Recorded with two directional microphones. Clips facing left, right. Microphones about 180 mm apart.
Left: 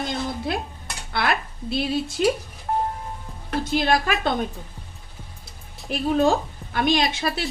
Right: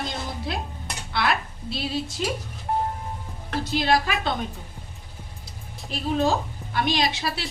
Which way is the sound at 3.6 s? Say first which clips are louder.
Left 1 dB; 50° left (ahead or behind).